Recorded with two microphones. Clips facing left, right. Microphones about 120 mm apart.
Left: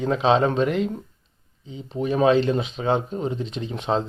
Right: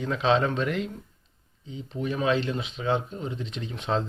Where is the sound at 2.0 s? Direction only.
35° left (ahead or behind).